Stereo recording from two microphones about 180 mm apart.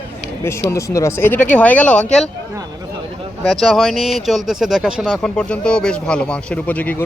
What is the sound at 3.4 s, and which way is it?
Speech, centre (ahead or behind).